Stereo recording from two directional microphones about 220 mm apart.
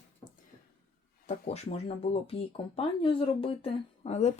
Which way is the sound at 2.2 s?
25° left (ahead or behind).